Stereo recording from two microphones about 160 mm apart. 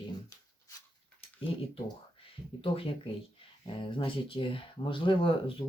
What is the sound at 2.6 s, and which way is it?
Speech, 35° left (ahead or behind).